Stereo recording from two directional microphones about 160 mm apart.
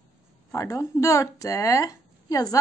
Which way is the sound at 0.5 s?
20° left (ahead or behind).